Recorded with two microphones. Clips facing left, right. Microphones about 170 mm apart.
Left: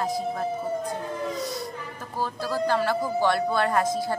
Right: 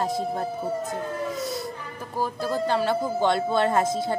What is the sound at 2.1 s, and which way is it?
A woman's voice, 15° right (ahead or behind).